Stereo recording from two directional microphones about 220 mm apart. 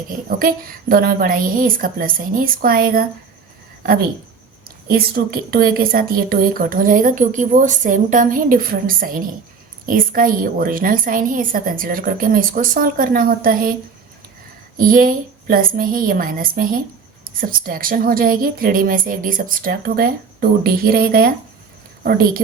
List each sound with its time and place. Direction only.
0.1 s a woman's voice: 40° right (ahead or behind)
4.9 s a woman's voice: 45° right (ahead or behind)
14.8 s a woman's voice: 40° right (ahead or behind)